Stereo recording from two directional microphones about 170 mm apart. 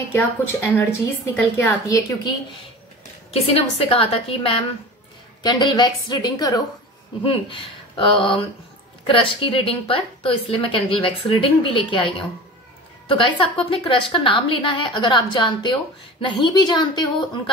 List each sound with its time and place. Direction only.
0.7 s a woman's voice: 10° left (ahead or behind)
3.3 s a woman's voice: 35° left (ahead or behind)